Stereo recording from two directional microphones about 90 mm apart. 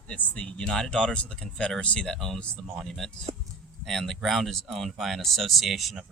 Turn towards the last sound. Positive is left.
turn(degrees=0)  # may be behind; listen again after turning